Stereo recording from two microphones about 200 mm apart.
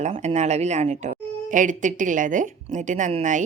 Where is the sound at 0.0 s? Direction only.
35° right (ahead or behind).